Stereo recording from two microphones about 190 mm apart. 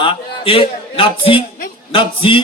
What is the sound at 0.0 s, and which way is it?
A man's voice, 30° left (ahead or behind).